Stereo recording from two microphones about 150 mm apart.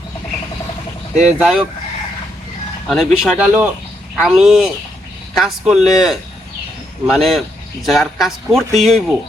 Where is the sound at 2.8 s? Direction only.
Centre (ahead or behind).